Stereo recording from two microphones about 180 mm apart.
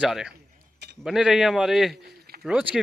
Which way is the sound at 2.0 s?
60° right (ahead or behind).